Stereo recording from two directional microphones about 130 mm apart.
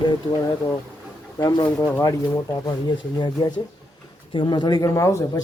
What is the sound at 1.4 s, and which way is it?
Speech, 30° left (ahead or behind).